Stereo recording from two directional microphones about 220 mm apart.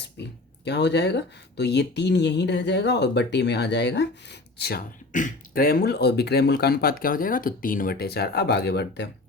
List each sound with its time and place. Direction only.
0.2 s speech: 50° left (ahead or behind)